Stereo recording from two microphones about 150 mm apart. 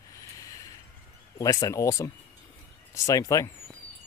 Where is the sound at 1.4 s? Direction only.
25° left (ahead or behind).